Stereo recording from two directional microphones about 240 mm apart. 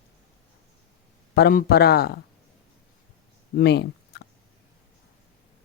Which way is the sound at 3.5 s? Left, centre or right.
Left.